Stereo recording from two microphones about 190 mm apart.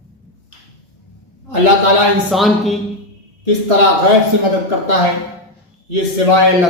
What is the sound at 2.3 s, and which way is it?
Speech, centre (ahead or behind).